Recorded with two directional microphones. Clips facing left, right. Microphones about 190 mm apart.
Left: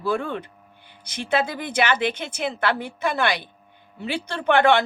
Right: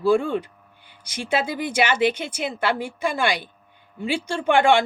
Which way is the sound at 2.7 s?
50° right (ahead or behind).